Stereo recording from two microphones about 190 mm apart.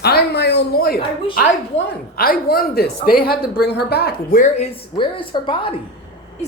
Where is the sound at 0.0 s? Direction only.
55° left (ahead or behind).